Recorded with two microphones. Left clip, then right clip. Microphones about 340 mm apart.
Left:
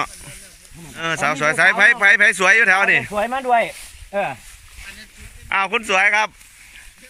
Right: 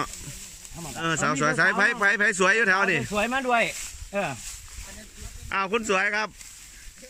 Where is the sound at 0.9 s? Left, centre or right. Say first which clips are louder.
Left 5 dB; centre.